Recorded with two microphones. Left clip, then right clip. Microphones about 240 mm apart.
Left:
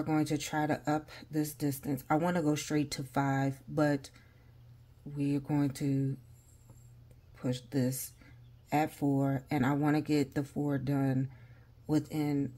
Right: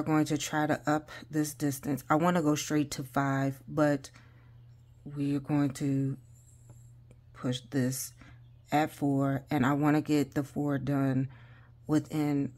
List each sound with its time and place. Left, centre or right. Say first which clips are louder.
0.0 s speech: right 3 dB; right
7.3 s speech: right 2 dB; centre